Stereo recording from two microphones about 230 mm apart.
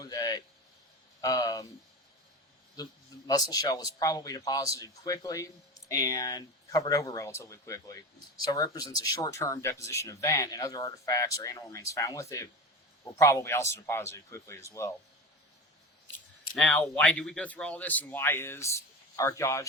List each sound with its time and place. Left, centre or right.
0.0 s a sound: centre
2.8 s speech: centre
16.6 s speech: centre